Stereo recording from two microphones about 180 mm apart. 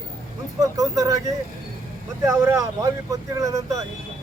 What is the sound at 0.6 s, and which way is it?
Speech, 20° right (ahead or behind).